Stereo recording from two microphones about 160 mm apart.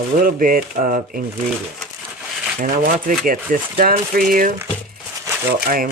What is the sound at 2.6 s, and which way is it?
Speech, 60° right (ahead or behind).